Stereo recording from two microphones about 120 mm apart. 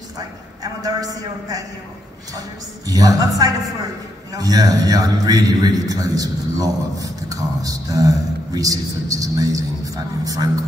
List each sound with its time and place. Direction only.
0.8 s a man's voice: 30° right (ahead or behind)
2.9 s a man's voice: 30° right (ahead or behind)